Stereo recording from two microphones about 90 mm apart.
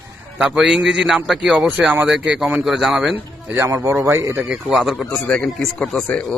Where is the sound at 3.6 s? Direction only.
30° right (ahead or behind).